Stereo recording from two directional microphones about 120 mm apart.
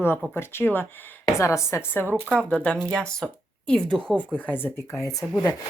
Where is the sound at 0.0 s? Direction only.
20° left (ahead or behind).